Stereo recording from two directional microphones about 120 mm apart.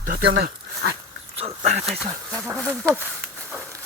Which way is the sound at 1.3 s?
65° right (ahead or behind).